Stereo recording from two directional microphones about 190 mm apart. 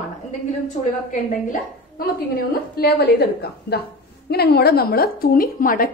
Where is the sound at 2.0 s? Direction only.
55° left (ahead or behind).